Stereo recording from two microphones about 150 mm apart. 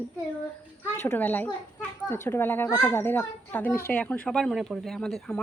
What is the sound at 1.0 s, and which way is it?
A child's voice, 15° left (ahead or behind).